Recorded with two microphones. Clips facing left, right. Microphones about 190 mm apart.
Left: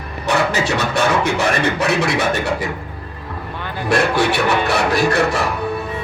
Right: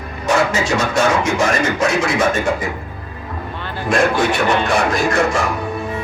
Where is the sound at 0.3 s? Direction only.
60° left (ahead or behind).